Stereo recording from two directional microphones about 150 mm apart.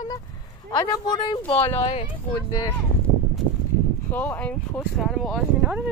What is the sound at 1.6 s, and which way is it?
Speech, 15° left (ahead or behind).